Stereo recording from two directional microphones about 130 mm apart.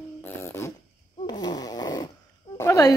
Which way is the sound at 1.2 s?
30° left (ahead or behind).